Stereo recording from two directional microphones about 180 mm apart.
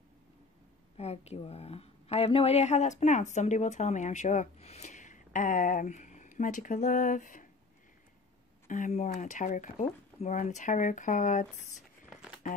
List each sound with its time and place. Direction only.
0.9 s speech: 35° left (ahead or behind)
8.6 s speech: 45° left (ahead or behind)